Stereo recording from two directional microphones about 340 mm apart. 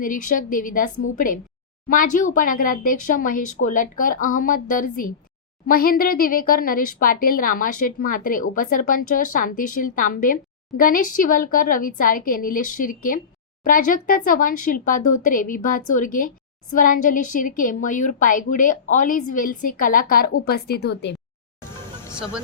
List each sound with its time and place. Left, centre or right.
0.0 s a woman's voice: left